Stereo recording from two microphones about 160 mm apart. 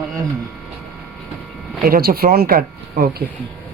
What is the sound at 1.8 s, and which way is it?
Speech, 70° right (ahead or behind).